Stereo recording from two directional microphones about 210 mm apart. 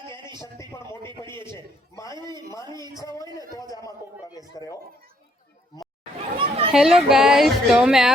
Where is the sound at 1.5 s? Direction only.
15° left (ahead or behind).